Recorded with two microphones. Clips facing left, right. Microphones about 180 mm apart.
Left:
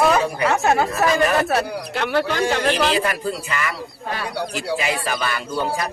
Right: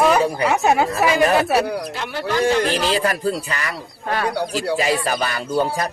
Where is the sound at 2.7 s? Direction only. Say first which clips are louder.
Even; 35° right (ahead or behind).